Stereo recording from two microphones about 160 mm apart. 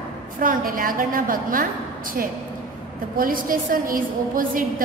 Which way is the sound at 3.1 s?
60° right (ahead or behind).